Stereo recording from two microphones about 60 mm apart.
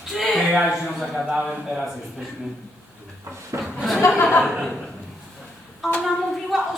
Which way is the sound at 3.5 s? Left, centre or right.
Right.